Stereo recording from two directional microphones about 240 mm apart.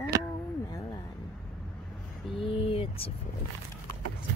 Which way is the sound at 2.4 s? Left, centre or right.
Left.